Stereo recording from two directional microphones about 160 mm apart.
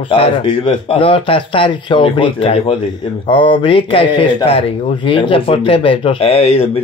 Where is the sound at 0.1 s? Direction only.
35° left (ahead or behind).